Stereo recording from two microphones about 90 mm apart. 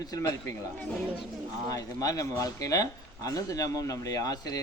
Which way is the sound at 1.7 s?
40° left (ahead or behind).